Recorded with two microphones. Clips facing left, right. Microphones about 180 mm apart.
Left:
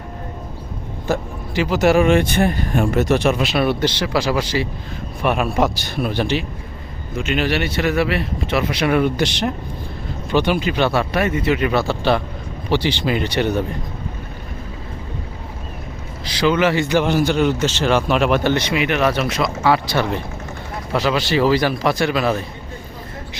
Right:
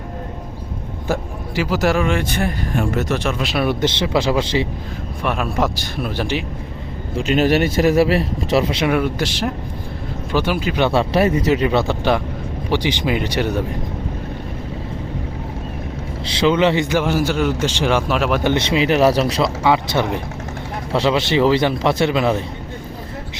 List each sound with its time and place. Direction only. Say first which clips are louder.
1.0 s speech: left 1 dB; 10° right (ahead or behind)
2.0 s speech: left 5 dB; 20° left (ahead or behind)
3.4 s speech: left 2 dB; centre (ahead or behind)
3.7 s a man's voice: right 1 dB; 20° right (ahead or behind)
5.2 s speech: left 2 dB; 5° left (ahead or behind)
7.1 s a man's voice: right 4 dB; 35° right (ahead or behind)
8.9 s speech: left 2 dB; centre (ahead or behind)
10.8 s a man's voice: right 6 dB; 30° right (ahead or behind); by 13.5 s 10° right (ahead or behind)
16.2 s a man's voice: right 1 dB; 25° right (ahead or behind)
16.9 s a man's voice: left 1 dB; 5° right (ahead or behind)
18.1 s speech: left 2 dB; centre (ahead or behind)
18.4 s a man's voice: right 2 dB; 25° right (ahead or behind)
19.6 s a man's voice: left 1 dB; 20° right (ahead or behind)